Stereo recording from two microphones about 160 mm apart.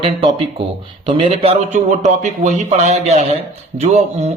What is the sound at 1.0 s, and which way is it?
A man's voice, 35° right (ahead or behind).